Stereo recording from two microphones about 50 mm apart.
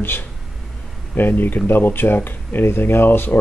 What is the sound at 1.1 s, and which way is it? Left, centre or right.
Speech, left.